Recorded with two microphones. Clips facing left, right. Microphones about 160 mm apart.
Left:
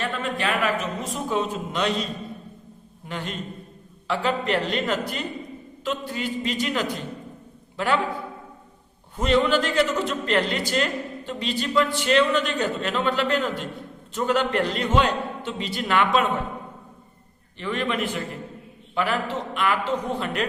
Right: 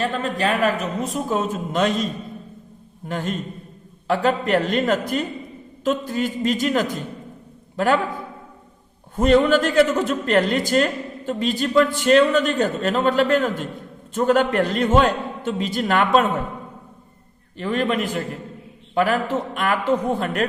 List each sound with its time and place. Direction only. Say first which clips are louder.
0.0 s a man's voice: right 4 dB; 40° right (ahead or behind)
3.1 s a man's voice: right 5 dB; 45° right (ahead or behind)
9.1 s a man's voice: right 5 dB; 45° right (ahead or behind)
17.6 s a man's voice: right 4 dB; 40° right (ahead or behind)